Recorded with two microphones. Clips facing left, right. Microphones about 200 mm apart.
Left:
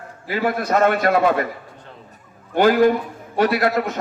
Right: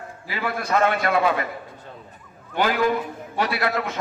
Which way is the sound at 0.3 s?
45° left (ahead or behind).